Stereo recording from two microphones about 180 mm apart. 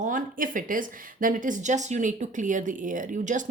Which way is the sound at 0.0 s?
45° right (ahead or behind).